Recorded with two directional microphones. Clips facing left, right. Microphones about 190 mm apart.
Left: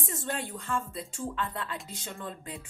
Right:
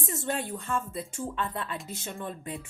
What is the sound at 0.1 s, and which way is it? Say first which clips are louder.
Speech: right 3 dB; 20° right (ahead or behind).